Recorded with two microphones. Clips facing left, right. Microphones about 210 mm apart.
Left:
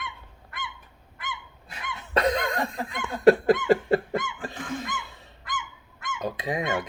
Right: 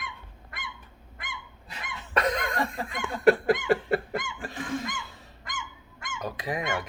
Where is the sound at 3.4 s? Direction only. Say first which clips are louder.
Left 3 dB; 20° left (ahead or behind).